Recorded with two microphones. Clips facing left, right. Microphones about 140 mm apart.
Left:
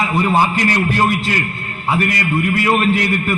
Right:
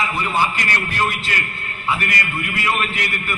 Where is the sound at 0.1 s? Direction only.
40° left (ahead or behind).